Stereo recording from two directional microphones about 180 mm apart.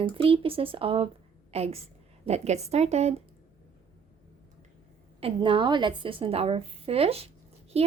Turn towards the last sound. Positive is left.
turn(degrees=-35)  # may be behind; listen again after turning